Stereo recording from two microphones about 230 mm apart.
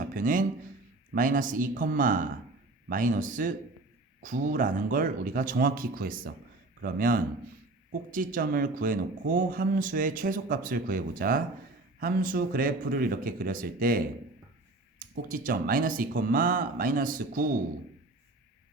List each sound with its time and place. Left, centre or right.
0.0 s speech: right